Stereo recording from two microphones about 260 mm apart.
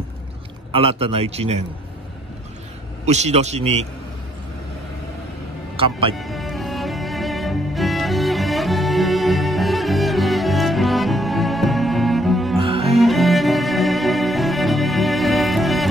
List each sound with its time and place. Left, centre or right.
0.7 s a man's voice: right
3.1 s a man's voice: right
5.8 s speech: centre
6.1 s music: centre
12.5 s music: right
12.9 s cello: centre